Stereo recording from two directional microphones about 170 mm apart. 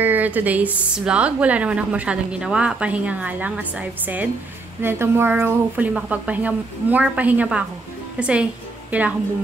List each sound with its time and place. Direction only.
0.0 s a woman's voice: 10° right (ahead or behind)